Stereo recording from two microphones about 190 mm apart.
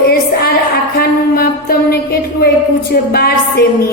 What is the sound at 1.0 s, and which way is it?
A woman's voice, 55° left (ahead or behind).